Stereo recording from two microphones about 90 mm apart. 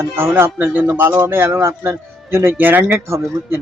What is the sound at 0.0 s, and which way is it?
Speech, 25° right (ahead or behind).